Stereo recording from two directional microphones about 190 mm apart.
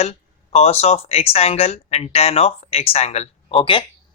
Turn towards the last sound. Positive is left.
turn(degrees=25)  # may be behind; listen again after turning